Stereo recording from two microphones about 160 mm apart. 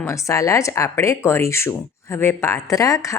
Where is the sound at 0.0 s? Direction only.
20° left (ahead or behind).